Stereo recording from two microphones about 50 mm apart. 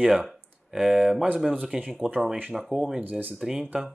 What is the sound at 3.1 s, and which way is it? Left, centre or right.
Speech, right.